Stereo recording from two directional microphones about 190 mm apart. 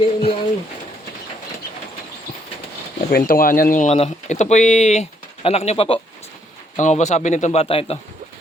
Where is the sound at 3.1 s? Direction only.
50° left (ahead or behind); by 7.9 s 30° left (ahead or behind).